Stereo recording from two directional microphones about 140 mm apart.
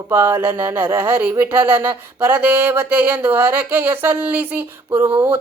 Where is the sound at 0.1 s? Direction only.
15° right (ahead or behind).